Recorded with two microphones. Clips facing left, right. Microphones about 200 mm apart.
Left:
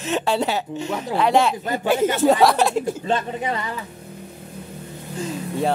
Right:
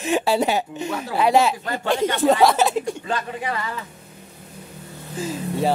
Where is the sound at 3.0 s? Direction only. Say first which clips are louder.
Left 3 dB; 25° left (ahead or behind).